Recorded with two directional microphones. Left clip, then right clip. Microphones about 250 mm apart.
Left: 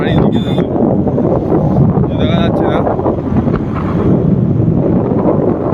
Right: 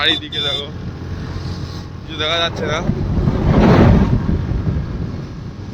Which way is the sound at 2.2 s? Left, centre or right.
Centre.